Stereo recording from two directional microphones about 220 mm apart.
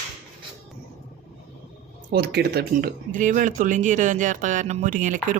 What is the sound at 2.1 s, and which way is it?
Speech, 50° right (ahead or behind).